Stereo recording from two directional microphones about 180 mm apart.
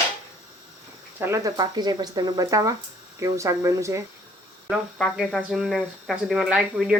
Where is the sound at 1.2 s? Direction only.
15° right (ahead or behind).